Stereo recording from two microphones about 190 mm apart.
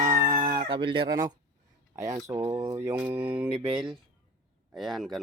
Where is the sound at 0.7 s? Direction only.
25° right (ahead or behind); by 3.5 s 10° right (ahead or behind).